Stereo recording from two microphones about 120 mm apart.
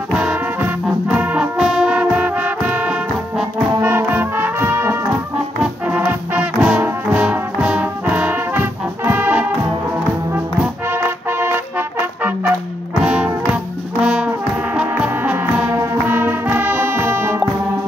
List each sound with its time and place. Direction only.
0.2 s music: 10° right (ahead or behind)
6.8 s trombone: 10° right (ahead or behind)
10.9 s music: 20° right (ahead or behind)
13.0 s music: 10° right (ahead or behind)
15.7 s music: 25° right (ahead or behind)